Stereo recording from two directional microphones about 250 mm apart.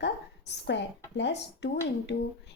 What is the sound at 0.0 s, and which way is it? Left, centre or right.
A woman's voice, left.